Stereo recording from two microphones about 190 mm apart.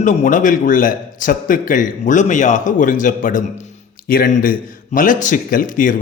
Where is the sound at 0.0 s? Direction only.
40° left (ahead or behind).